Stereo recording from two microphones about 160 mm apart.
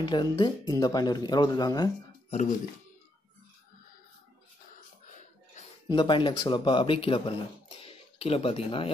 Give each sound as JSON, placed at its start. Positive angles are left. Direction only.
{"t": 0.0, "sound": "speech", "side_deg": 25}
{"t": 5.9, "sound": "speech", "side_deg": 30}